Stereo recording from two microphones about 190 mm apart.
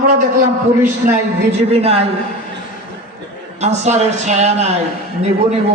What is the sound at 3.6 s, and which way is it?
A man's voice, 35° right (ahead or behind).